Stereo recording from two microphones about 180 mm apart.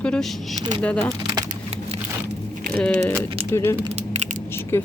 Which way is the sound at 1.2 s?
20° right (ahead or behind).